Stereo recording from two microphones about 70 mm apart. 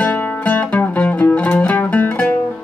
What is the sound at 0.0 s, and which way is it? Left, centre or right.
Music, left.